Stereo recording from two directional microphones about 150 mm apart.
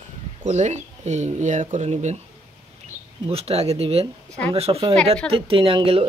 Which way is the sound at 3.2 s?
40° right (ahead or behind).